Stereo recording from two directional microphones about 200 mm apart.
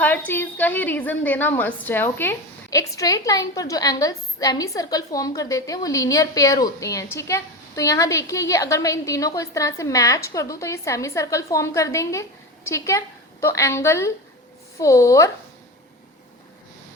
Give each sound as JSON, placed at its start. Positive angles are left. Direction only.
{"t": 0.0, "sound": "a woman's voice", "side_deg": 10}